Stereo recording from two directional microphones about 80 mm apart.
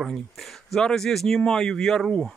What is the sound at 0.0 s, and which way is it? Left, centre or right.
Speech, centre.